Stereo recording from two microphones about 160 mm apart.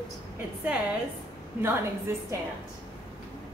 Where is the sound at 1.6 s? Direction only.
15° right (ahead or behind).